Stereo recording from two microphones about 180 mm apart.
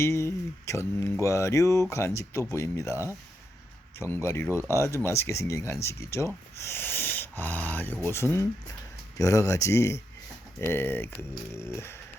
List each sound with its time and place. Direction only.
0.0 s speech: 15° left (ahead or behind)